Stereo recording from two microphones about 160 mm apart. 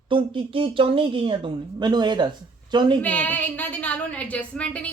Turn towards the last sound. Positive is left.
turn(degrees=5)  # may be behind; listen again after turning